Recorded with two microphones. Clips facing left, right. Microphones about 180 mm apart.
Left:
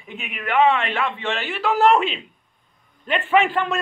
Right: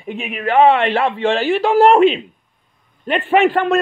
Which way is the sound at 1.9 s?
55° right (ahead or behind).